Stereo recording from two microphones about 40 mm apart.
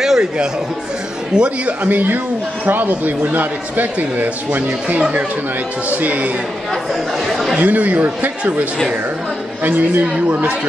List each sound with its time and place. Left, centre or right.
0.0 s a sound: centre
1.3 s speech: right
1.9 s a man's voice: right
5.9 s speech: right
7.2 s speech: centre
7.5 s a man's voice: right